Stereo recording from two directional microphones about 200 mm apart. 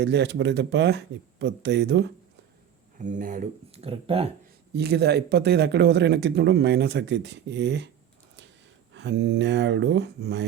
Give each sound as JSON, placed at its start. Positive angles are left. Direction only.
{"t": 0.0, "sound": "speech", "side_deg": -60}
{"t": 3.0, "sound": "speech", "side_deg": -40}
{"t": 4.7, "sound": "speech", "side_deg": -55}
{"t": 8.9, "sound": "speech", "side_deg": -65}